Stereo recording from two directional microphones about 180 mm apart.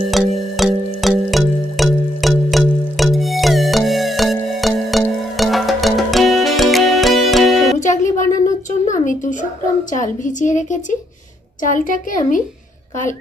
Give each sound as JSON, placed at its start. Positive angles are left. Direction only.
{"t": 0.1, "sound": "music", "side_deg": 0}
{"t": 7.8, "sound": "a sound", "side_deg": 45}
{"t": 9.9, "sound": "a woman's voice", "side_deg": 45}